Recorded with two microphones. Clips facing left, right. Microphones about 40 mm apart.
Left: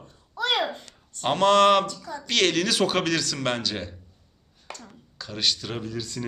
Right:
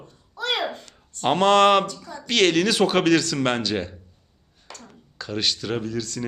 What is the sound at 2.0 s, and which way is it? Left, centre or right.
Speech, centre.